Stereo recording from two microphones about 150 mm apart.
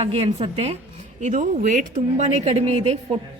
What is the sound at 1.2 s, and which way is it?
A woman's voice, 55° right (ahead or behind).